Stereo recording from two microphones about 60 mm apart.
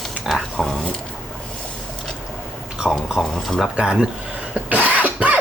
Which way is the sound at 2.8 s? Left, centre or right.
Centre.